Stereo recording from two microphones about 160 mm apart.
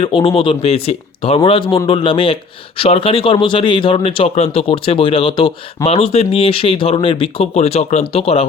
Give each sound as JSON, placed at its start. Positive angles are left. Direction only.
{"t": 0.0, "sound": "speech", "side_deg": 35}